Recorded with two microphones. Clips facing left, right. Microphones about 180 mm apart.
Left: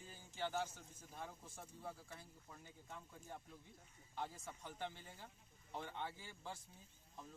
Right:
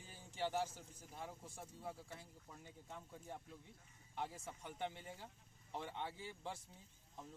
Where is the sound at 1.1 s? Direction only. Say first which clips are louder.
Right 1 dB; 20° right (ahead or behind).